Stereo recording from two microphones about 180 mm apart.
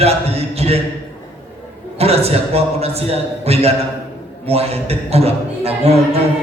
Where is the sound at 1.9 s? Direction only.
35° right (ahead or behind).